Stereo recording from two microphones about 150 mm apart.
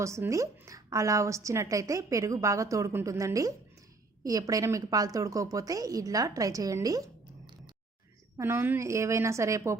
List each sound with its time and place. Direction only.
0.0 s a woman's voice: 20° right (ahead or behind)
8.4 s a woman's voice: 15° right (ahead or behind)